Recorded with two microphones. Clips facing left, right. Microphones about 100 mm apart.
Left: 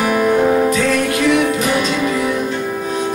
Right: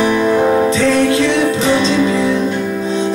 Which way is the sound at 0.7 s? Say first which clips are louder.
Right 3 dB; 30° right (ahead or behind).